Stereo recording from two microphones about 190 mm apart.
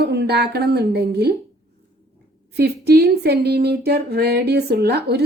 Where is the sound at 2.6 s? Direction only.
60° right (ahead or behind).